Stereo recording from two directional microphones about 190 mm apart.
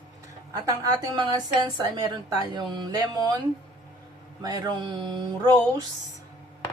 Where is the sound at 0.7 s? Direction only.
20° right (ahead or behind).